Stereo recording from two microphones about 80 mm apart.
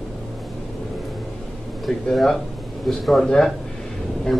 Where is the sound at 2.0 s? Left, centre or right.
Centre.